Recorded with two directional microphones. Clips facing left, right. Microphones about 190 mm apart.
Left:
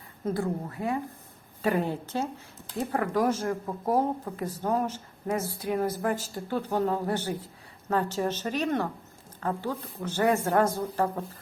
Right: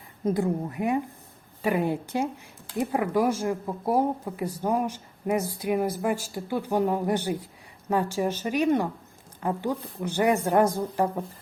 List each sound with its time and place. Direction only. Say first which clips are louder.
0.3 s speech: right 4 dB; 20° right (ahead or behind)